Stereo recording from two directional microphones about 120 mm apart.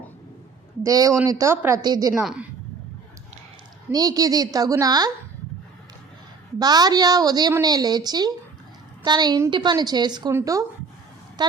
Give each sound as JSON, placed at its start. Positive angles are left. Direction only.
{"t": 0.9, "sound": "a woman's voice", "side_deg": -30}
{"t": 2.1, "sound": "a woman's voice", "side_deg": -5}
{"t": 3.9, "sound": "a woman's voice", "side_deg": -30}
{"t": 6.6, "sound": "a woman's voice", "side_deg": -35}